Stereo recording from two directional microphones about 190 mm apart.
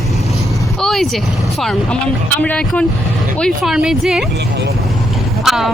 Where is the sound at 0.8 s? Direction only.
Centre (ahead or behind).